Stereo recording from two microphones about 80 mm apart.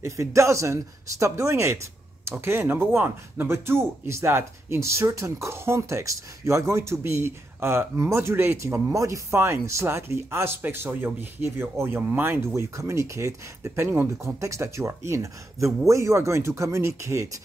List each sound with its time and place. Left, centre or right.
0.0 s speech: right
8.9 s speech: right